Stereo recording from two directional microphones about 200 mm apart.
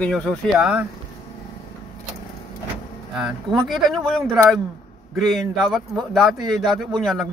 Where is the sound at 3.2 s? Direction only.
Centre (ahead or behind).